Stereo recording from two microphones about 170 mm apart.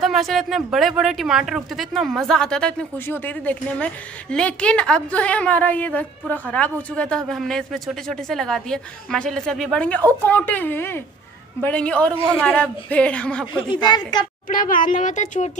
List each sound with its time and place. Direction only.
0.0 s a woman's voice: centre (ahead or behind)
13.5 s a woman's voice: 30° left (ahead or behind)
14.5 s speech: 55° left (ahead or behind)